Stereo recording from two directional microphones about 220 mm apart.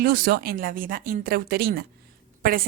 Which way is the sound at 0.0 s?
40° right (ahead or behind).